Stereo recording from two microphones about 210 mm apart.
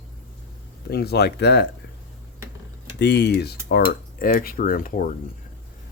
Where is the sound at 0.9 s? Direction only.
50° left (ahead or behind).